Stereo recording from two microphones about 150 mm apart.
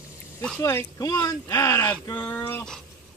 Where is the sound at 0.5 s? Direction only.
20° left (ahead or behind).